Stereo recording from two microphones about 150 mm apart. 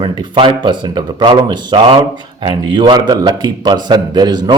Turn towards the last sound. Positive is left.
turn(degrees=-30)  # may be behind; listen again after turning